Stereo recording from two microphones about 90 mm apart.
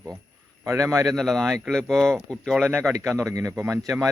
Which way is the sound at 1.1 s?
5° left (ahead or behind).